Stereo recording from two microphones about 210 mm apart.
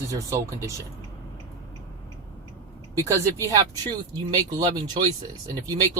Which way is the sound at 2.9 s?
15° right (ahead or behind).